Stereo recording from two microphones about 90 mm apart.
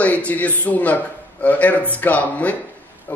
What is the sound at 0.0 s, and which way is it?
A man's voice, 15° left (ahead or behind).